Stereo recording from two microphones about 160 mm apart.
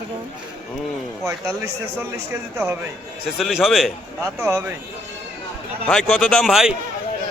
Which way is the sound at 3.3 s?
5° right (ahead or behind).